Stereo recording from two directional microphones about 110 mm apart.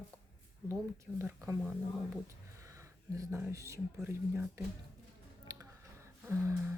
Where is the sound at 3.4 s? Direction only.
25° right (ahead or behind).